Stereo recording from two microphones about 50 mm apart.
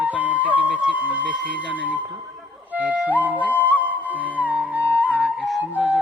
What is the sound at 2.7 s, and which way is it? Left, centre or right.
Music, right.